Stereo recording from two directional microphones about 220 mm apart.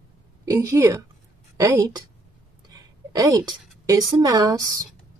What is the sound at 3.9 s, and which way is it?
Speech, 20° right (ahead or behind).